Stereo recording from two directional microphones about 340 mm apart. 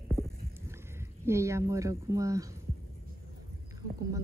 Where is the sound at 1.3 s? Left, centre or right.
Centre.